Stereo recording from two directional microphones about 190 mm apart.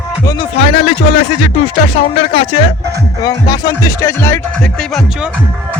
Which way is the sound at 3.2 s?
20° left (ahead or behind).